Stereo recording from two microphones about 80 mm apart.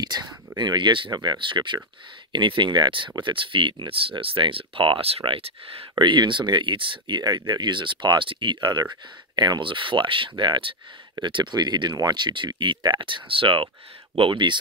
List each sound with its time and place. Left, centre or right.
0.0 s speech: right
5.9 s speech: right
9.3 s speech: right